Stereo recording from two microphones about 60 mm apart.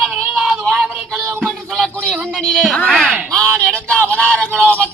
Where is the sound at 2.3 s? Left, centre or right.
Centre.